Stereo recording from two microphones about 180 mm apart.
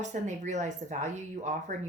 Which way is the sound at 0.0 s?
40° right (ahead or behind).